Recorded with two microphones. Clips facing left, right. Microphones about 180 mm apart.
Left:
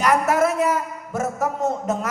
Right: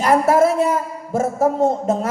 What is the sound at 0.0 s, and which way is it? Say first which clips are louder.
A man's voice: right 4 dB; 30° right (ahead or behind).